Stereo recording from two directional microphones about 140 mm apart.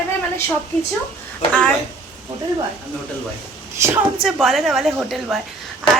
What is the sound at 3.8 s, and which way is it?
Speech, 20° right (ahead or behind).